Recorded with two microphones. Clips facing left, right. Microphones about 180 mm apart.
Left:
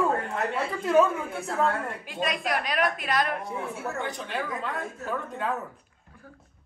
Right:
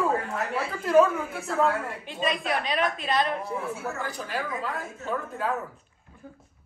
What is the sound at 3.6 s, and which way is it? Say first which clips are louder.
A woman's voice: even; centre (ahead or behind).